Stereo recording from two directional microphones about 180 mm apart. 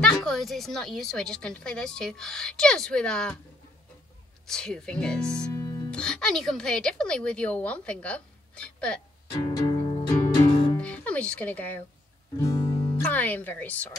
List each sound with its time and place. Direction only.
0.0 s a woman's voice: 5° left (ahead or behind)
4.5 s a woman's voice: 5° left (ahead or behind)
5.5 s music: 20° left (ahead or behind)
5.9 s a woman's voice: 5° left (ahead or behind)
9.3 s music: 20° left (ahead or behind)
10.8 s speech: 5° left (ahead or behind)